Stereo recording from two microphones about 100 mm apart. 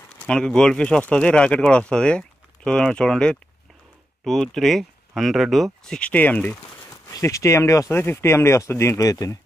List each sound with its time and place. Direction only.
0.3 s speech: 5° left (ahead or behind)
6.9 s speech: 35° left (ahead or behind)